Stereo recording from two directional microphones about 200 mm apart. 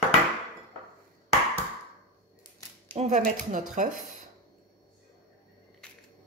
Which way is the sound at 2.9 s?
35° right (ahead or behind).